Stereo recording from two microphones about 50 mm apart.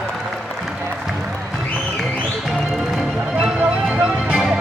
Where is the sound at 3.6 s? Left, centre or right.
Centre.